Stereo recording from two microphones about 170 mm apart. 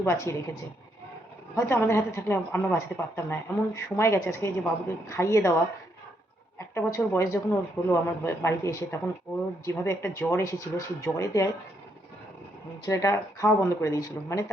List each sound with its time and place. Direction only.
0.0 s a woman's voice: 15° left (ahead or behind)
1.5 s a woman's voice: 15° left (ahead or behind)
6.7 s a woman's voice: 15° left (ahead or behind)
12.8 s speech: 20° left (ahead or behind)